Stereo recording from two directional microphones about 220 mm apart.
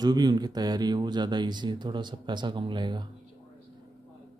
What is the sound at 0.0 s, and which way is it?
Speech, 20° right (ahead or behind).